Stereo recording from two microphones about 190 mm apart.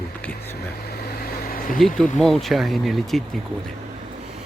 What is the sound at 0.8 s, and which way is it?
Vehicle, 55° left (ahead or behind).